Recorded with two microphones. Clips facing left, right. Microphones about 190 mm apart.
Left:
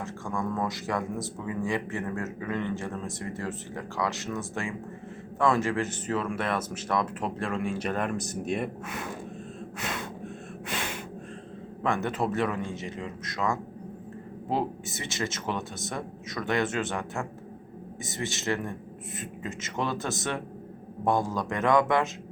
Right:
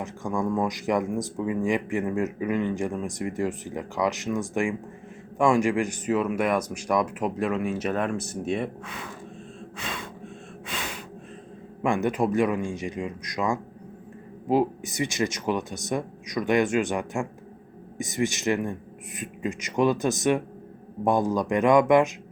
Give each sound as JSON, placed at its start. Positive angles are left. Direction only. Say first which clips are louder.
{"t": 0.0, "sound": "speech", "louder": "right 4 dB", "side_deg": -15}
{"t": 11.8, "sound": "speech", "louder": "right 4 dB", "side_deg": -15}